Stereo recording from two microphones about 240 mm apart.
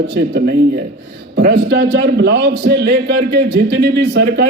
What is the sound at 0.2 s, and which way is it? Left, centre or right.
A man's voice, right.